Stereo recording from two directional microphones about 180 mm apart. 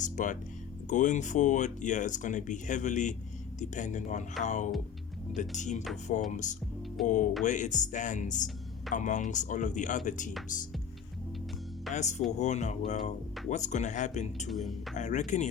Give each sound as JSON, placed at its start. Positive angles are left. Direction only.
{"t": 0.0, "sound": "speech", "side_deg": 45}
{"t": 11.9, "sound": "speech", "side_deg": 40}
{"t": 14.5, "sound": "speech", "side_deg": 0}
{"t": 14.9, "sound": "speech", "side_deg": 40}